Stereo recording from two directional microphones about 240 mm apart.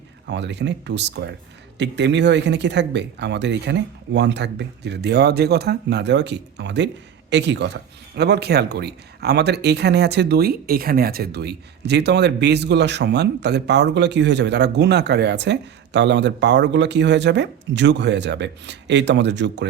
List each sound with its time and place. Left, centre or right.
0.3 s speech: right